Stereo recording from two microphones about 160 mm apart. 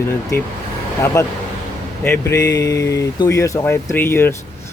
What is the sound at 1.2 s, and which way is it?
Speech, 20° left (ahead or behind).